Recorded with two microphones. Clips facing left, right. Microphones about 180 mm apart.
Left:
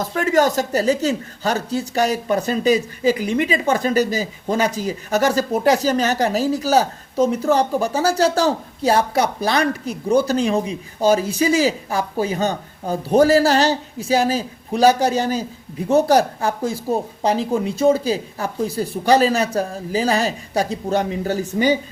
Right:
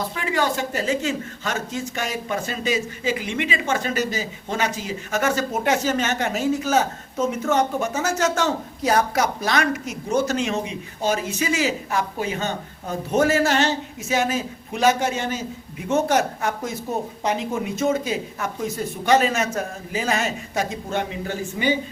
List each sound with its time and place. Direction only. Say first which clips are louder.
0.0 s speech: left 7 dB; 45° left (ahead or behind)